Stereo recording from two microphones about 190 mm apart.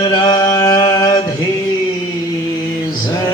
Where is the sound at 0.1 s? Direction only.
20° left (ahead or behind).